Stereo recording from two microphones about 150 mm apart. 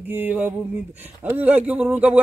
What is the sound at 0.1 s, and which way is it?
Speech, 10° right (ahead or behind).